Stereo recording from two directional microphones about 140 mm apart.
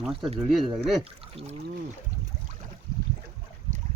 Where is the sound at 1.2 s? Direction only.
45° right (ahead or behind).